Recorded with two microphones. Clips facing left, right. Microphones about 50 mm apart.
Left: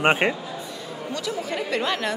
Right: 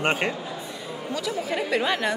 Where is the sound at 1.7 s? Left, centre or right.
Centre.